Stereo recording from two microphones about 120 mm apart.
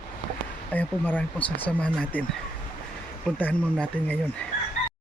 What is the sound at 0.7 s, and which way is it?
Speech, 15° left (ahead or behind).